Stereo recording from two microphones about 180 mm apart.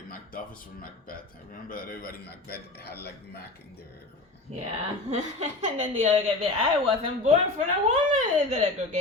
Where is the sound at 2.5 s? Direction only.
10° left (ahead or behind).